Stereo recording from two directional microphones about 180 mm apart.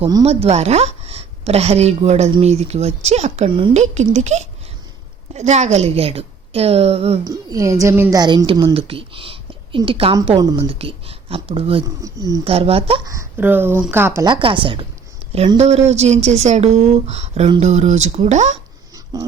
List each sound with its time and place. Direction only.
0.0 s a woman's voice: 20° right (ahead or behind)
0.3 s a woman's voice: 35° right (ahead or behind)
7.3 s a woman's voice: 20° right (ahead or behind)
12.0 s a woman's voice: 20° right (ahead or behind)
12.5 s a woman's voice: 35° right (ahead or behind)
13.1 s speech: 15° right (ahead or behind)
14.3 s a woman's voice: 30° right (ahead or behind)
19.1 s a woman's voice: 20° right (ahead or behind)